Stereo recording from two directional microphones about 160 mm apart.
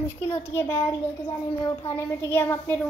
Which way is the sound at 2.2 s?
15° left (ahead or behind).